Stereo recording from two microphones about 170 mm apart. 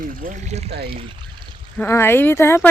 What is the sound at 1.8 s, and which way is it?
Speech, 15° left (ahead or behind).